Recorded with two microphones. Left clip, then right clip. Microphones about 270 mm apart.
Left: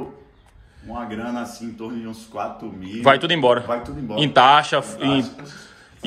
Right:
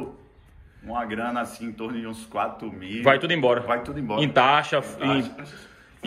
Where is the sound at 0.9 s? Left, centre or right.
Centre.